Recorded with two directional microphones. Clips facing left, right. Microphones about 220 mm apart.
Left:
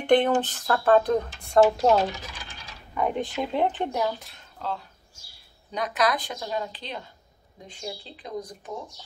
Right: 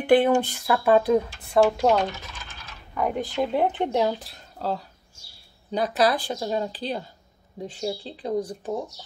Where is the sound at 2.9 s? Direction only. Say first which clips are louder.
Right 2 dB; 5° right (ahead or behind).